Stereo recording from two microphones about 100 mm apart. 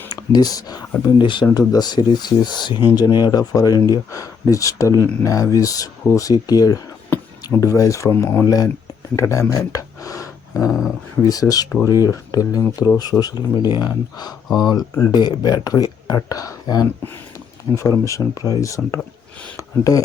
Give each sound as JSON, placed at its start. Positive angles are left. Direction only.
{"t": 0.2, "sound": "speech", "side_deg": 40}
{"t": 1.2, "sound": "speech", "side_deg": 55}
{"t": 1.5, "sound": "speech", "side_deg": 40}
{"t": 8.4, "sound": "speech", "side_deg": 40}
{"t": 9.1, "sound": "a sound", "side_deg": 30}
{"t": 10.7, "sound": "speech", "side_deg": -5}
{"t": 11.3, "sound": "speech", "side_deg": 40}
{"t": 18.8, "sound": "speech", "side_deg": 0}
{"t": 19.5, "sound": "speech", "side_deg": 35}